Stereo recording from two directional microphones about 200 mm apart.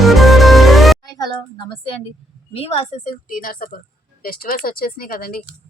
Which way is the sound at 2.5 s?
30° left (ahead or behind).